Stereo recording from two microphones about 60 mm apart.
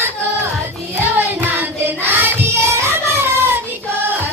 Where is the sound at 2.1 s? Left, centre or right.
Right.